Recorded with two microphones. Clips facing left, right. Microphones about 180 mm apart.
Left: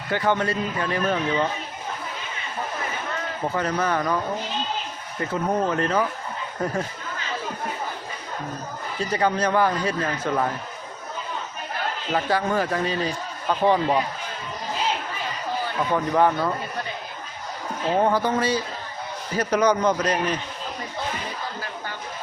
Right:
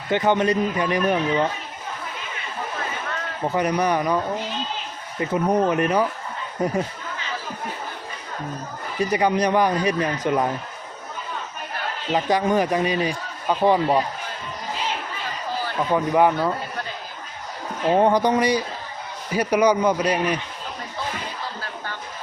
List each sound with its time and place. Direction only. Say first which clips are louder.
0.1 s a man's voice: right 4 dB; 20° right (ahead or behind)
3.5 s a man's voice: right 4 dB; 15° right (ahead or behind)
5.2 s a man's voice: right 4 dB; 15° right (ahead or behind)
9.0 s a man's voice: right 3 dB; 15° right (ahead or behind)
12.1 s a man's voice: right 3 dB; 15° right (ahead or behind)
15.9 s a man's voice: right 2 dB; 10° right (ahead or behind)
17.9 s a man's voice: right 3 dB; 20° right (ahead or behind)